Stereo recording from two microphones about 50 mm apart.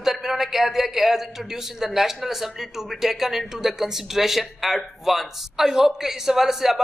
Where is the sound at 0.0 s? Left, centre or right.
Centre.